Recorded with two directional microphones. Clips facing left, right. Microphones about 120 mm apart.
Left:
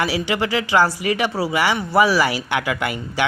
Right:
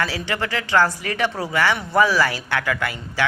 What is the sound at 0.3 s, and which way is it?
Speech, 15° left (ahead or behind).